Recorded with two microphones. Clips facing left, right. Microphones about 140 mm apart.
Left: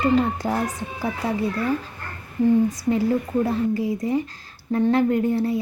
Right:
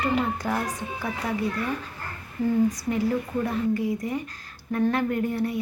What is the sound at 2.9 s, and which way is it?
A woman's voice, 30° left (ahead or behind).